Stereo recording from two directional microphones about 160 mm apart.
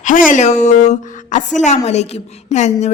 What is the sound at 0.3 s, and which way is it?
A woman's voice, 50° left (ahead or behind).